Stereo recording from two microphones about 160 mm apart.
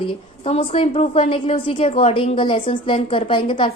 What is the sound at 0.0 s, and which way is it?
A woman's voice, 35° left (ahead or behind).